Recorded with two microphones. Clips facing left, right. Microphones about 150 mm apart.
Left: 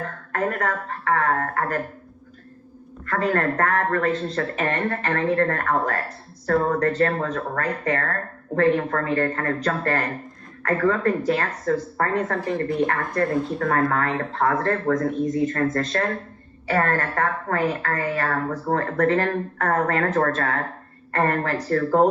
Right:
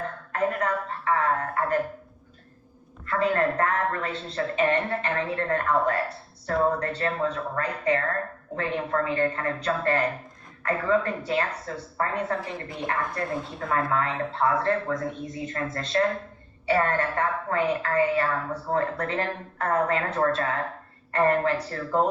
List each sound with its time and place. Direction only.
0.3 s speech: 50° left (ahead or behind)
3.1 s speech: 50° left (ahead or behind)
11.7 s speech: 60° left (ahead or behind)